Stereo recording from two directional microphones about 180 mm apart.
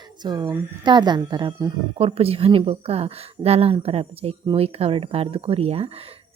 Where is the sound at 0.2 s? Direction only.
25° right (ahead or behind).